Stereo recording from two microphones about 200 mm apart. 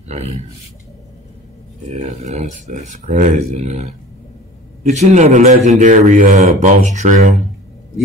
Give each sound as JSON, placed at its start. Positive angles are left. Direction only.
{"t": 1.9, "sound": "speech", "side_deg": -35}